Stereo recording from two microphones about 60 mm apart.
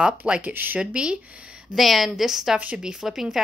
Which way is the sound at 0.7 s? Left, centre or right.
Centre.